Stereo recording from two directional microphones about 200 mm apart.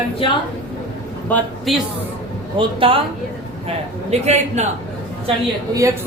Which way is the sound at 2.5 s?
25° right (ahead or behind).